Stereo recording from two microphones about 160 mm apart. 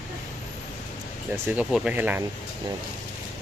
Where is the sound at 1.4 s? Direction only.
10° right (ahead or behind).